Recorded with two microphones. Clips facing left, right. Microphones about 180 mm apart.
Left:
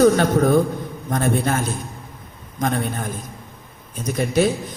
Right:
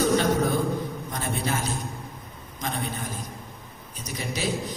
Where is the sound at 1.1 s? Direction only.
50° left (ahead or behind).